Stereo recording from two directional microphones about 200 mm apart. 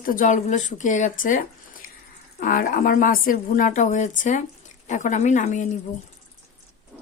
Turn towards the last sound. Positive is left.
turn(degrees=40)  # may be behind; listen again after turning